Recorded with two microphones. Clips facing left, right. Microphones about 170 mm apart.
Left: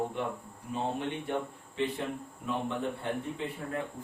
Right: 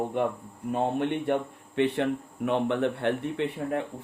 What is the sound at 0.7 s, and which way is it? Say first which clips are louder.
Speech: right 6 dB; 60° right (ahead or behind).